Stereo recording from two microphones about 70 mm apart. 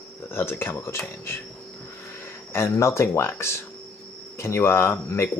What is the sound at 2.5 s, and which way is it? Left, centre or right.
Speech, left.